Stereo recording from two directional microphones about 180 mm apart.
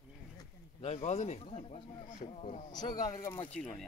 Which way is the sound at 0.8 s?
35° left (ahead or behind).